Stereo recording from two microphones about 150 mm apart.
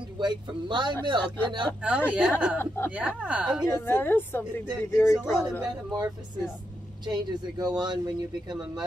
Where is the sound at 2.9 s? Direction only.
10° right (ahead or behind).